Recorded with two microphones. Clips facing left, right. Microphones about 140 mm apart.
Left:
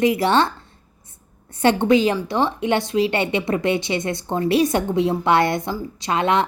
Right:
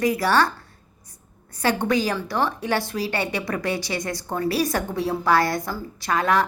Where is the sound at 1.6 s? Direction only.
25° left (ahead or behind).